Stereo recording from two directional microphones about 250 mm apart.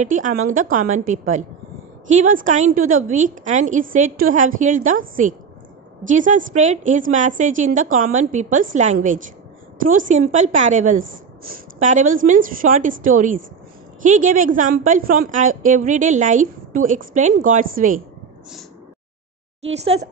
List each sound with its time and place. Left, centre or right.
0.0 s a woman's voice: right
2.4 s a woman's voice: right
19.7 s a woman's voice: right